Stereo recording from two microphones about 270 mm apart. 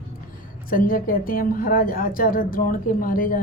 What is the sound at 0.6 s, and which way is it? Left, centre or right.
A woman's voice, left.